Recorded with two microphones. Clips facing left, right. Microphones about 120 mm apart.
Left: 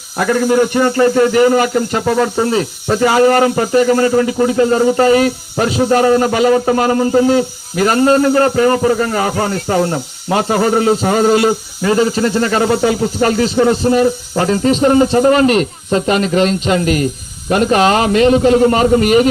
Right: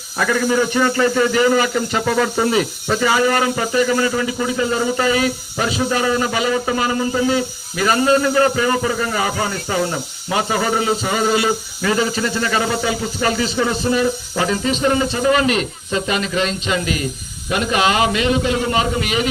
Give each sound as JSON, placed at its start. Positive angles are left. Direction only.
{"t": 0.2, "sound": "a man's voice", "side_deg": 35}
{"t": 2.5, "sound": "a man's voice", "side_deg": 30}
{"t": 3.0, "sound": "speech", "side_deg": 50}
{"t": 11.8, "sound": "a man's voice", "side_deg": 30}